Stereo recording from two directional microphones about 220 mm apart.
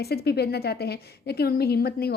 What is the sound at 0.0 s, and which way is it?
A woman's voice, 45° left (ahead or behind).